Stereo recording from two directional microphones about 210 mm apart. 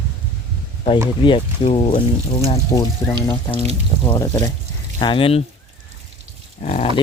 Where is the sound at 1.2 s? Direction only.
25° left (ahead or behind).